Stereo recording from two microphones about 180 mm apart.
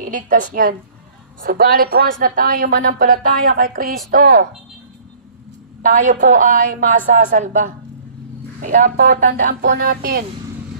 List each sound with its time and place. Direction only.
0.0 s a woman's voice: 45° right (ahead or behind)
5.8 s a woman's voice: 45° right (ahead or behind)
9.6 s music: 65° right (ahead or behind)